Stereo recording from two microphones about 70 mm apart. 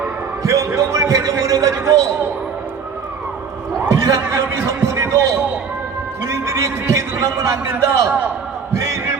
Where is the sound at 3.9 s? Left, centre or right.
Right.